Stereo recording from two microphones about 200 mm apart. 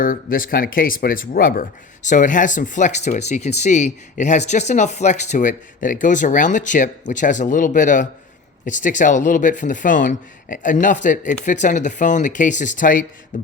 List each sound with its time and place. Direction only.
0.0 s speech: 45° left (ahead or behind)
13.3 s beatboxing: 40° left (ahead or behind)